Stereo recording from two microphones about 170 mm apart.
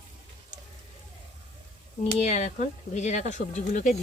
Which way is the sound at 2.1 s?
40° left (ahead or behind).